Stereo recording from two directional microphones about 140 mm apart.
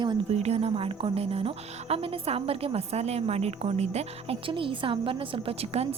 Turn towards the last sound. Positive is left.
turn(degrees=-45)  # may be behind; listen again after turning